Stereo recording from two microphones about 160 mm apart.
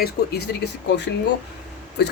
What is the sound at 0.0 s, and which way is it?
Speech, 90° left.